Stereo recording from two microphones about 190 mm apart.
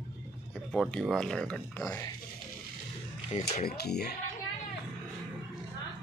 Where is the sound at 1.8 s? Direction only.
15° left (ahead or behind).